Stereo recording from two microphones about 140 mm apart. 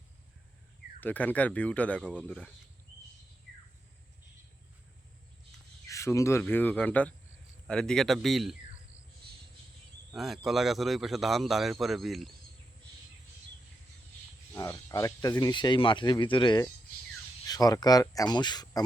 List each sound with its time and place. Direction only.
1.0 s speech: 10° left (ahead or behind)
5.9 s speech: 20° left (ahead or behind); by 8.5 s centre (ahead or behind)
10.1 s speech: centre (ahead or behind)
14.5 s speech: 20° left (ahead or behind)